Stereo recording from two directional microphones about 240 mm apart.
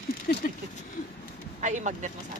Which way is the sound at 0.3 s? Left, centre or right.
Left.